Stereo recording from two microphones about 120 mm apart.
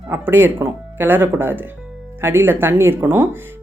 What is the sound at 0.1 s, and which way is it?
Speech, 20° right (ahead or behind).